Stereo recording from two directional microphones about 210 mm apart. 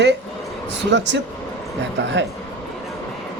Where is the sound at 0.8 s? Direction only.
55° right (ahead or behind).